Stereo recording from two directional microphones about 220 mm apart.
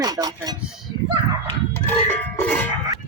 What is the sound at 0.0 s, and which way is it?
Speech, 15° right (ahead or behind).